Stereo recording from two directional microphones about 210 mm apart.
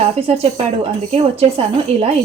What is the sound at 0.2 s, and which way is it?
A woman's voice, 30° right (ahead or behind).